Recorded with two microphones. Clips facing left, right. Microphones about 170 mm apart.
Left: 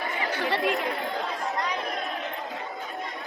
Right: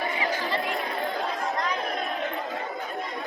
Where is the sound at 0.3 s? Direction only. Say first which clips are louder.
Left 3 dB; 70° left (ahead or behind).